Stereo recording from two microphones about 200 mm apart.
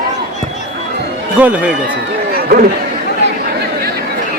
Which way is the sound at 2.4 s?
50° right (ahead or behind).